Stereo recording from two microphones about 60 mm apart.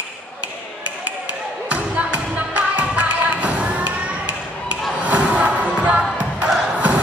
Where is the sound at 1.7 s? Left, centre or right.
Right.